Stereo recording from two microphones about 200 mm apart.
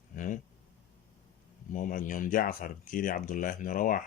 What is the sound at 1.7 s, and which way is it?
Speech, 40° left (ahead or behind).